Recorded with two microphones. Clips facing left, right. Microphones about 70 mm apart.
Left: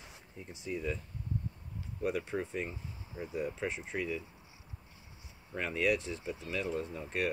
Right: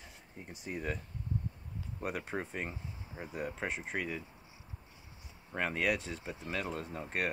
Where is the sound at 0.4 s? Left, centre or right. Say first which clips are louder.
Left 2 dB; right.